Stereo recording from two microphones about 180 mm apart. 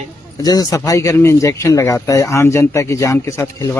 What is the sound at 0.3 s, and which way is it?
Speech, 20° left (ahead or behind).